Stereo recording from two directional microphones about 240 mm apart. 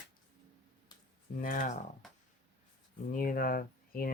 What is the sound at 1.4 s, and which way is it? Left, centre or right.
Speech, left.